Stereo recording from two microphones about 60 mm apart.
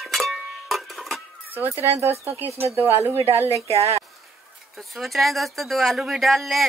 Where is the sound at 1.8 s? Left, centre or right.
Right.